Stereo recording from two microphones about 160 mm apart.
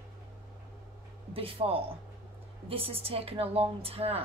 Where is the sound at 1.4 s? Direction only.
35° right (ahead or behind).